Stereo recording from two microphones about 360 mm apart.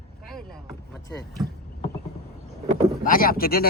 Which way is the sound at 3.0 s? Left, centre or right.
Left.